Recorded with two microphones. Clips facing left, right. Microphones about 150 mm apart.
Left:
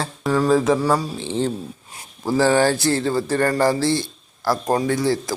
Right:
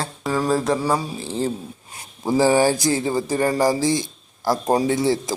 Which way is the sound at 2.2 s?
15° right (ahead or behind).